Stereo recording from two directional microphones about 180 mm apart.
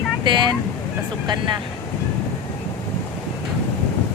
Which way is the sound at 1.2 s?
25° right (ahead or behind).